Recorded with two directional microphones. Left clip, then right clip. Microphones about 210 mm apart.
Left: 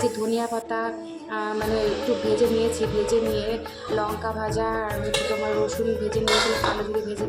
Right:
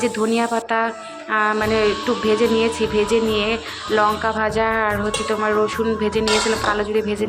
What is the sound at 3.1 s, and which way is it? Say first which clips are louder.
Music: right 5 dB; 10° right (ahead or behind).